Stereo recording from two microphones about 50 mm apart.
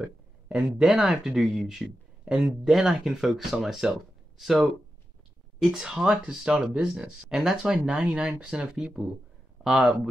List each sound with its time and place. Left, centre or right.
0.0 s speech: centre
1.0 s speech: centre
7.6 s speech: centre